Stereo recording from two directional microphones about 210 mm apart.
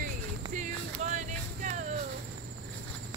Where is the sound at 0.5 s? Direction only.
35° right (ahead or behind).